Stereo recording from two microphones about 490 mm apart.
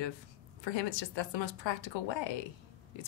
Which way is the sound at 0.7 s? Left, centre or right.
Left.